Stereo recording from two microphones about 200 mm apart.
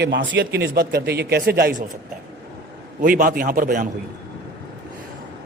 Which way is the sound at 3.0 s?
45° right (ahead or behind).